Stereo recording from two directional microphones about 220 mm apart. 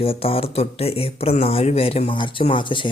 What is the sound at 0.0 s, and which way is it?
Speech, 25° left (ahead or behind).